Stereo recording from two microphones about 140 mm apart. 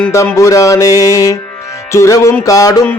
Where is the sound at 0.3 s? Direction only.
25° left (ahead or behind).